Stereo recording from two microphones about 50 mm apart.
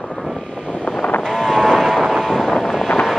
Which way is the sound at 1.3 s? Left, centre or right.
Centre.